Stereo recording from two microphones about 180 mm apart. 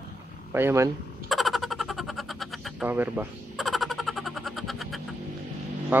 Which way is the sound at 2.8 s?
10° right (ahead or behind).